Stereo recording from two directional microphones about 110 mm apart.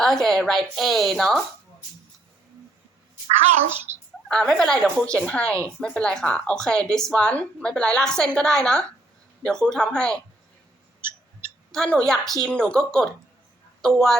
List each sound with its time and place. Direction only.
0.0 s a woman's voice: 5° left (ahead or behind)
3.9 s a sound: 90° right
4.3 s speech: 5° left (ahead or behind)
11.7 s a woman's voice: 5° left (ahead or behind)